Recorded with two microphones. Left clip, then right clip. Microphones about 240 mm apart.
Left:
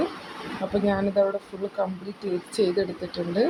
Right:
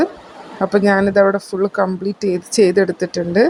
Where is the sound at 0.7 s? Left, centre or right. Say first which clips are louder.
Right 11 dB; right.